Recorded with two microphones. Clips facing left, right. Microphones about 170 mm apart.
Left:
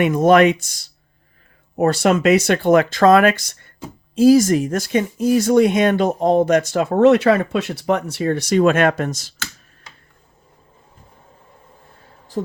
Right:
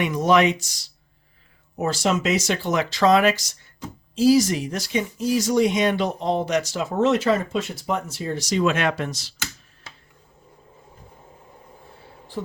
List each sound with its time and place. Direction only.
0.0 s speech: 50° left (ahead or behind)